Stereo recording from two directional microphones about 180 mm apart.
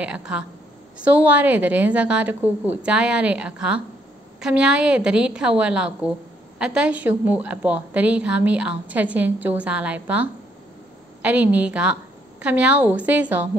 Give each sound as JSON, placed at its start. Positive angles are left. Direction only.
{"t": 0.0, "sound": "a woman's voice", "side_deg": -5}
{"t": 11.2, "sound": "a woman's voice", "side_deg": -10}